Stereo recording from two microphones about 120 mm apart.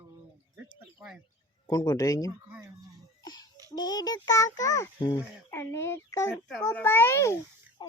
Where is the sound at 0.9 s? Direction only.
5° right (ahead or behind).